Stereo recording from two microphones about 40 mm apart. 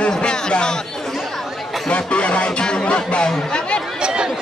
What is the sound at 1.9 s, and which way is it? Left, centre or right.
Speech, left.